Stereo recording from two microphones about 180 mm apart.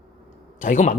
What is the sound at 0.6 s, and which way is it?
Speech, 45° left (ahead or behind).